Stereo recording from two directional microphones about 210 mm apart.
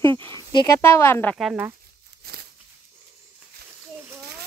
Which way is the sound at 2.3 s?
50° right (ahead or behind).